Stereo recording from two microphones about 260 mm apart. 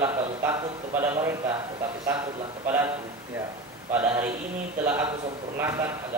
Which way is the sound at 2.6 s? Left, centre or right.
Centre.